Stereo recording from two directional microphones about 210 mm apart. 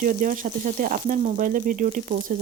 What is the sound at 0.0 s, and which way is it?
Speech, 40° right (ahead or behind).